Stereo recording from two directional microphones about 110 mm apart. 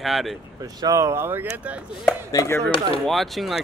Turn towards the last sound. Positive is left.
turn(degrees=0)  # may be behind; listen again after turning